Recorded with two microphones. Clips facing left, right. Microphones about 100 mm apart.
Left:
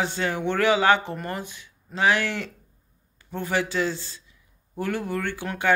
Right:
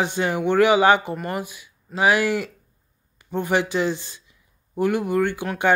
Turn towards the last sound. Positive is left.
turn(degrees=-15)  # may be behind; listen again after turning